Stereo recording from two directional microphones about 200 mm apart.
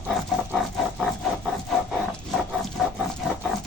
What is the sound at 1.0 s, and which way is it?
Wood, centre (ahead or behind).